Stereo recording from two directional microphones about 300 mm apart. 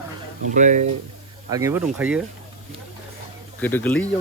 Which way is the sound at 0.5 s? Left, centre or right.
Right.